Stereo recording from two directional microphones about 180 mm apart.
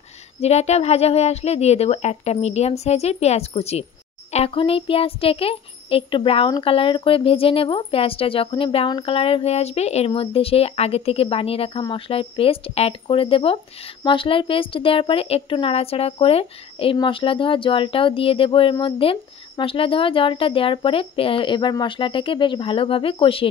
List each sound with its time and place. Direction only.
0.4 s a woman's voice: 35° left (ahead or behind)